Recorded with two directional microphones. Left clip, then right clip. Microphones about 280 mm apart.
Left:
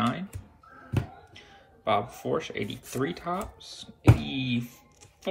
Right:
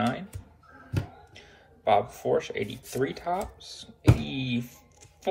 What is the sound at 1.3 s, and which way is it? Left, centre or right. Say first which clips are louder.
Speech: left 1 dB; centre.